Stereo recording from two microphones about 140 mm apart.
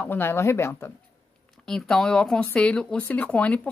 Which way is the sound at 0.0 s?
15° left (ahead or behind).